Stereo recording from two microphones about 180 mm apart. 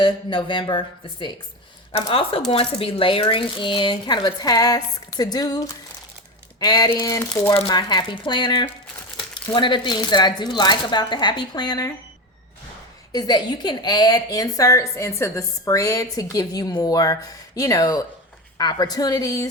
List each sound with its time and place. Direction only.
0.0 s speech: 25° left (ahead or behind)
13.1 s speech: 25° left (ahead or behind)